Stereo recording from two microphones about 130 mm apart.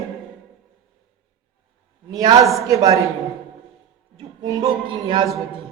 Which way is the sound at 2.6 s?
25° right (ahead or behind).